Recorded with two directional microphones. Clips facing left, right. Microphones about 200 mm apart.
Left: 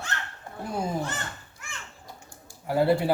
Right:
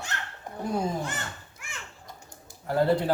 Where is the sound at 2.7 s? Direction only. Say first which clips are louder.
Left 1 dB; 10° left (ahead or behind).